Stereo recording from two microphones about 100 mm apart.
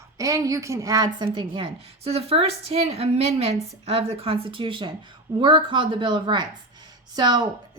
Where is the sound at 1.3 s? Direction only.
60° right (ahead or behind); by 3.5 s 90° right.